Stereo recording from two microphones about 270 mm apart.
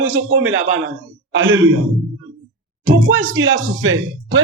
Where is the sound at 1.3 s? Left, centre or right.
Right.